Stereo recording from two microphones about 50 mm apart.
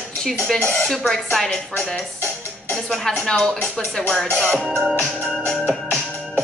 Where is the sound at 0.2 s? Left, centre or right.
Centre.